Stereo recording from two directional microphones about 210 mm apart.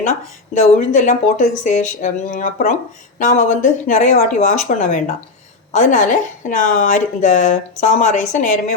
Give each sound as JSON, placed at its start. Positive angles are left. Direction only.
{"t": 0.0, "sound": "a woman's voice", "side_deg": 35}